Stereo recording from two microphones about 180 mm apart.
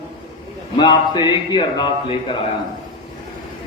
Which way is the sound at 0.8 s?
25° left (ahead or behind).